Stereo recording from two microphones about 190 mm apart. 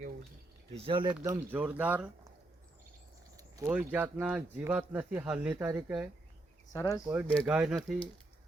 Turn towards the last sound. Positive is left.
turn(degrees=-5)  # may be behind; listen again after turning